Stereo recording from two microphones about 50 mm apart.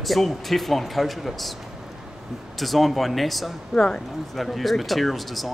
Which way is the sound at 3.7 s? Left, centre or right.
Centre.